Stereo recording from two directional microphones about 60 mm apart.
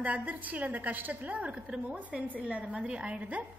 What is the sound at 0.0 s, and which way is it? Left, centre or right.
A woman's voice, right.